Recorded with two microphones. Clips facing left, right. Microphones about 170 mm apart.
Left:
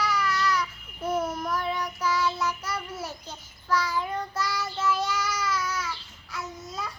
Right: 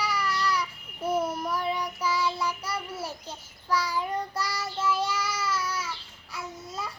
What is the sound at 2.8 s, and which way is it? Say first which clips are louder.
Speech: even; 10° right (ahead or behind).